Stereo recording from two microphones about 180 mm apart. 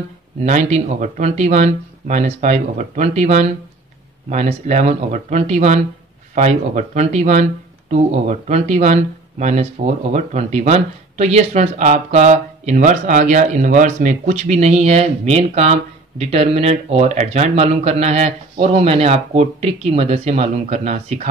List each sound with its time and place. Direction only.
0.4 s speech: 40° right (ahead or behind)